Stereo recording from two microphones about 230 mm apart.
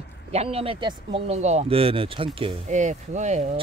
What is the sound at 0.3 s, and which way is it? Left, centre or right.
Speech, right.